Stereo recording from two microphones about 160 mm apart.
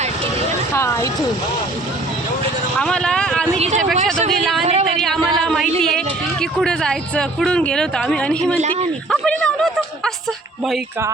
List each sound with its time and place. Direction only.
0.7 s speech: 15° left (ahead or behind)
2.7 s vehicle: 5° left (ahead or behind)
3.6 s speech: 45° right (ahead or behind)
4.3 s speech: centre (ahead or behind)
4.6 s a sound: 40° right (ahead or behind)
4.9 s a man's voice: 5° left (ahead or behind)